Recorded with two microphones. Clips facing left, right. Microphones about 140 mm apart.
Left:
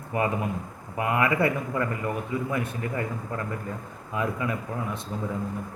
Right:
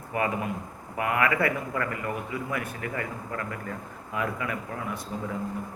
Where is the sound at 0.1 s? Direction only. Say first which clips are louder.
Left 2 dB; 25° left (ahead or behind).